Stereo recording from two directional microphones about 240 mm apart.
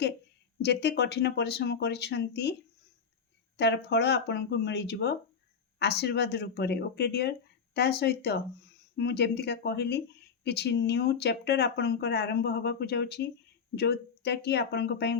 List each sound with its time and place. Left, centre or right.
0.6 s speech: left
3.6 s speech: left